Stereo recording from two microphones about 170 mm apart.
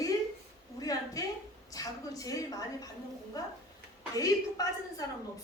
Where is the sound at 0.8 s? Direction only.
20° left (ahead or behind).